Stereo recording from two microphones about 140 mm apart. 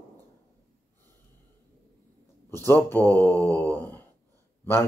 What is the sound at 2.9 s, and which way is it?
Speech, 15° left (ahead or behind).